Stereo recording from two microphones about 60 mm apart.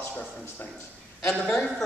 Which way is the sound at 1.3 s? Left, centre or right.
Centre.